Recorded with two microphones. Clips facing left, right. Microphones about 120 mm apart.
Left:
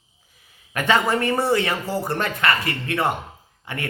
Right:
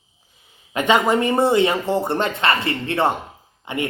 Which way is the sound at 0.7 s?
20° right (ahead or behind).